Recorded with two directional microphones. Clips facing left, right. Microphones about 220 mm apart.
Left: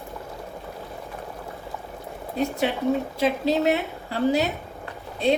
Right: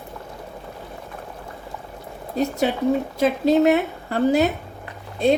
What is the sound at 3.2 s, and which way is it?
A woman's voice, 50° right (ahead or behind).